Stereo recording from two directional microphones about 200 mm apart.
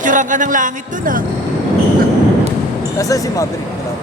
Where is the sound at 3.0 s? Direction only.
15° left (ahead or behind).